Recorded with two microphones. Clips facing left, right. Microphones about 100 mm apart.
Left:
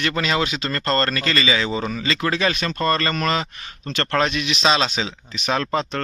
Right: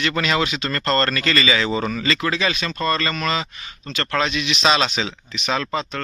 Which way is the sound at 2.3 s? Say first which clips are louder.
Left 1 dB; 45° left (ahead or behind).